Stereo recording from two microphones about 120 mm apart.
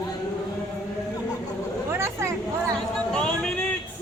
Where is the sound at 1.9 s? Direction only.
20° right (ahead or behind).